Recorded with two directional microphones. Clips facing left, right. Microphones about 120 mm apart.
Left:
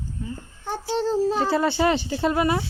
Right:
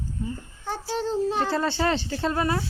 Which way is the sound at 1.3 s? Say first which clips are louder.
Left 3 dB; 10° left (ahead or behind).